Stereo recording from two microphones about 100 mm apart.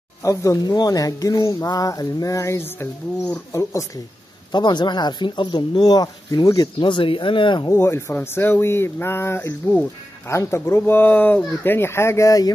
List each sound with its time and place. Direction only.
0.2 s speech: 30° left (ahead or behind)
4.5 s speech: 45° left (ahead or behind)
7.7 s speech: 25° left (ahead or behind)